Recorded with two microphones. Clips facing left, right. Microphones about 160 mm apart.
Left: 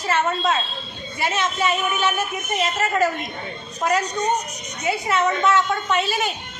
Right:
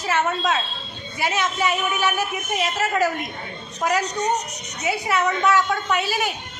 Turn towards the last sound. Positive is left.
turn(degrees=-10)  # may be behind; listen again after turning